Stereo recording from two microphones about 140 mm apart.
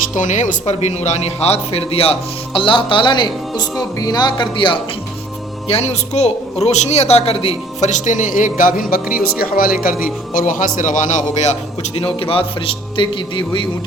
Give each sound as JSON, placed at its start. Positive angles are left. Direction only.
{"t": 0.1, "sound": "a man's voice", "side_deg": 65}
{"t": 5.6, "sound": "speech", "side_deg": 50}
{"t": 8.5, "sound": "music", "side_deg": 80}
{"t": 9.4, "sound": "speech", "side_deg": 90}
{"t": 10.3, "sound": "a man's voice", "side_deg": 70}
{"t": 11.9, "sound": "a man's voice", "side_deg": 40}